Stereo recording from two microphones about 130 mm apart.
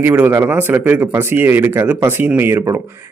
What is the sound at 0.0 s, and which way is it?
A man's voice, 15° right (ahead or behind).